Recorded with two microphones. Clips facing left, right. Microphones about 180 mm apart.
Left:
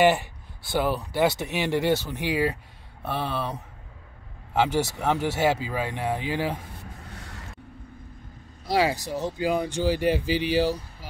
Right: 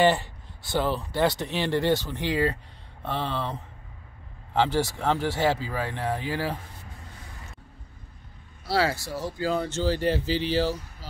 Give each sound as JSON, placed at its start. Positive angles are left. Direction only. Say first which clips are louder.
{"t": 0.0, "sound": "speech", "louder": "left 1 dB", "side_deg": 10}
{"t": 4.6, "sound": "speech", "louder": "left 1 dB", "side_deg": 15}
{"t": 7.1, "sound": "a sound", "louder": "left 4 dB", "side_deg": 75}
{"t": 8.6, "sound": "speech", "louder": "left 2 dB", "side_deg": 15}